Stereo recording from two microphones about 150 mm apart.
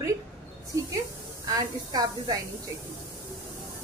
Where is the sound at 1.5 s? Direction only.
25° right (ahead or behind).